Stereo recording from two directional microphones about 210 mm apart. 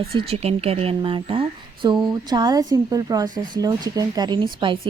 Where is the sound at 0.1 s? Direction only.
30° right (ahead or behind).